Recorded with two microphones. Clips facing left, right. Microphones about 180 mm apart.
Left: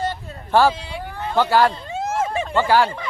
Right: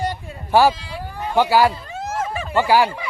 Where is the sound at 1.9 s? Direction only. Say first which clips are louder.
Left 3 dB; 25° left (ahead or behind).